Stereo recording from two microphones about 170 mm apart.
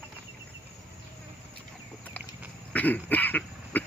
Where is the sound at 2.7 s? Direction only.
10° left (ahead or behind).